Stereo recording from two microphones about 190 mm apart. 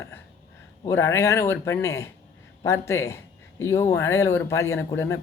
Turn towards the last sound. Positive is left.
turn(degrees=15)  # may be behind; listen again after turning